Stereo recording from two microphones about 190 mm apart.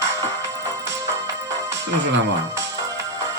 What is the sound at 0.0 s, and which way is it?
Music, 15° right (ahead or behind).